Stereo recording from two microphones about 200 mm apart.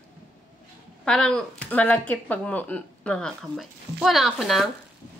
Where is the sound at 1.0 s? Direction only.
5° left (ahead or behind).